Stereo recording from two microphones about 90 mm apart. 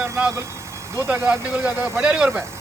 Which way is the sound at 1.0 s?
25° right (ahead or behind).